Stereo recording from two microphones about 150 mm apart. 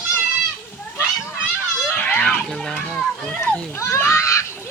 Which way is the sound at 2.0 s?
10° left (ahead or behind).